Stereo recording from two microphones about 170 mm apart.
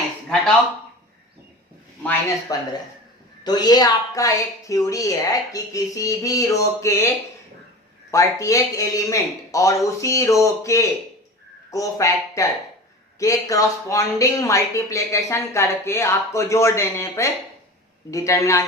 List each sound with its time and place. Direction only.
2.5 s a woman's voice: 20° left (ahead or behind)
8.1 s a woman's voice: 20° left (ahead or behind)